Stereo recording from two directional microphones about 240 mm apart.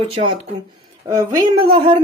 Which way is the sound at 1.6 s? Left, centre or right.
Centre.